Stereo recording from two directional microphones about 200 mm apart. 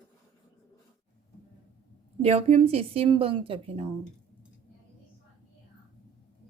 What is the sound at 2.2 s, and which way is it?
A woman's voice, 30° right (ahead or behind).